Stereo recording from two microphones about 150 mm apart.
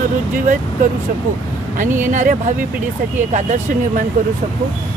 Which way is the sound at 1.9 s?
15° right (ahead or behind).